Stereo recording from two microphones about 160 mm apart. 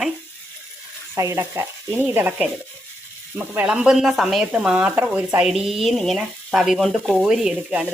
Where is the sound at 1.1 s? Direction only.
15° right (ahead or behind).